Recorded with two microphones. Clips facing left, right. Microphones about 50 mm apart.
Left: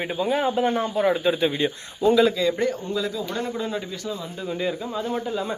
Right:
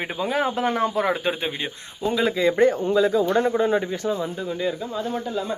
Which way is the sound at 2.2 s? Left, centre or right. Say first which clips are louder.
Right 3 dB; right.